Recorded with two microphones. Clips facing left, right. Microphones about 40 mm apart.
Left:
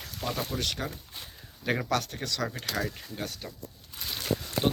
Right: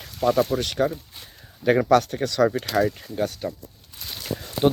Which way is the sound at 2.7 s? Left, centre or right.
Right.